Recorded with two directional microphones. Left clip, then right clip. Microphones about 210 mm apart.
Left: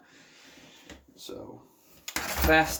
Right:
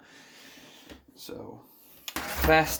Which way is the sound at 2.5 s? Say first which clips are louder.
Even; 40° right (ahead or behind).